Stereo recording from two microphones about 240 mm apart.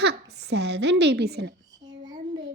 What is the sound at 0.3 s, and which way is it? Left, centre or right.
Speech, right.